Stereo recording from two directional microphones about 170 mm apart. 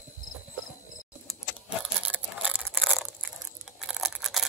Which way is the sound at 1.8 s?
5° right (ahead or behind).